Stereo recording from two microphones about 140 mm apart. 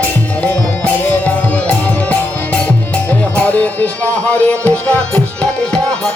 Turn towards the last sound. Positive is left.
turn(degrees=5)  # may be behind; listen again after turning